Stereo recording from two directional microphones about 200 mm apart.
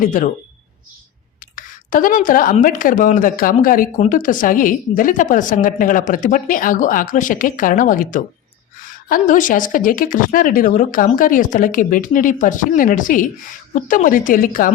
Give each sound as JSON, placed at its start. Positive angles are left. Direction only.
{"t": 0.0, "sound": "speech", "side_deg": 40}
{"t": 1.5, "sound": "a woman's voice", "side_deg": 45}